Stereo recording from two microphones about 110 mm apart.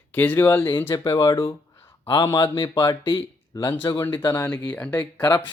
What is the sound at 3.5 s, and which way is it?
Speech, 35° left (ahead or behind).